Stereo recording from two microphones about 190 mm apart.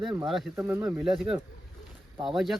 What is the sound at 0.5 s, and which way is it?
Speech, 10° right (ahead or behind).